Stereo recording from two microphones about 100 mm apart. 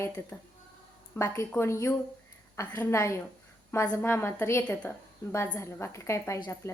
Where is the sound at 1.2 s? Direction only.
25° left (ahead or behind).